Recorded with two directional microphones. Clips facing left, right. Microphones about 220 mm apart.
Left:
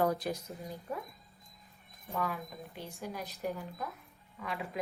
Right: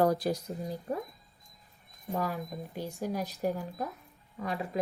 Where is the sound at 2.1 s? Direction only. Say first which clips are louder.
Right 4 dB; 45° right (ahead or behind).